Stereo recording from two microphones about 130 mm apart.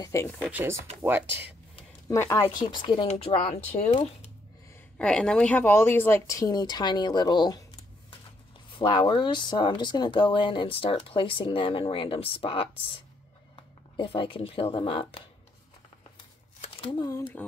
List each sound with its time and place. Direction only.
0.0 s speech: 25° left (ahead or behind)
0.4 s speech: 15° right (ahead or behind)
2.0 s speech: 25° left (ahead or behind)
3.1 s speech: 50° left (ahead or behind)
4.9 s speech: 5° left (ahead or behind); by 7.6 s 35° left (ahead or behind)
8.7 s speech: 40° left (ahead or behind)
17.4 s speech: 15° left (ahead or behind)